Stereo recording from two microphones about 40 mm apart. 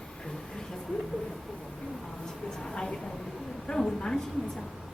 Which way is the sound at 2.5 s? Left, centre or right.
Centre.